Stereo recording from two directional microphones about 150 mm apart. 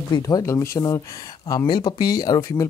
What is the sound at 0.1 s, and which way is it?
Speech, 25° left (ahead or behind).